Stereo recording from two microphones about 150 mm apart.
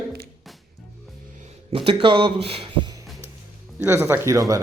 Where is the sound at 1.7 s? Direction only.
35° right (ahead or behind).